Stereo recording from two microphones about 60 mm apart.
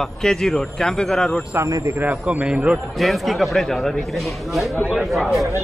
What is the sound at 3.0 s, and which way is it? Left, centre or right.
A man's voice, centre.